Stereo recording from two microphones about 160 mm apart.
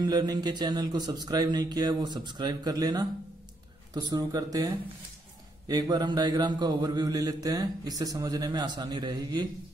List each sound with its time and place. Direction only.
0.0 s mantra: 25° right (ahead or behind)